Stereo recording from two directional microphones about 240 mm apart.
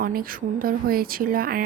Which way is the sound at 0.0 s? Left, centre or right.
Right.